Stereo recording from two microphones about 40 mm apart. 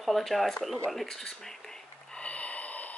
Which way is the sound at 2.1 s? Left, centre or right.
Left.